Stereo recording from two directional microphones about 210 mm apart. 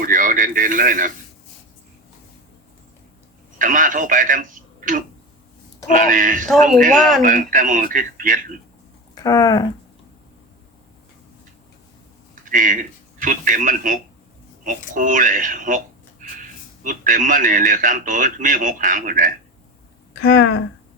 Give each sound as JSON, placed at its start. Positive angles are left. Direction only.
{"t": 0.0, "sound": "radio", "side_deg": -40}
{"t": 3.6, "sound": "a man's voice", "side_deg": -40}
{"t": 9.1, "sound": "speech", "side_deg": 15}
{"t": 12.5, "sound": "a man's voice", "side_deg": -40}
{"t": 16.8, "sound": "a man's voice", "side_deg": -40}
{"t": 20.1, "sound": "speech", "side_deg": 50}